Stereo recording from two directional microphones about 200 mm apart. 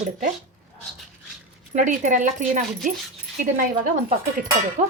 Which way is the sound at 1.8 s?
40° right (ahead or behind).